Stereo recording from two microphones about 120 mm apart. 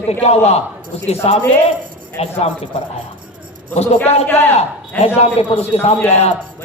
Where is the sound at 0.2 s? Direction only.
60° left (ahead or behind).